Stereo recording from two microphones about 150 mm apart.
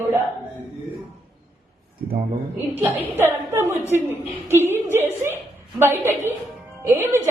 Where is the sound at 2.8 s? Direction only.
15° right (ahead or behind).